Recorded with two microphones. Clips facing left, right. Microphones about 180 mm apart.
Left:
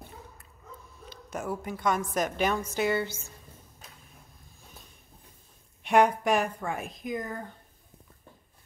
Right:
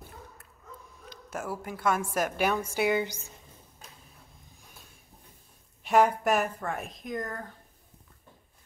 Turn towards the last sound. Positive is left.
turn(degrees=0)  # may be behind; listen again after turning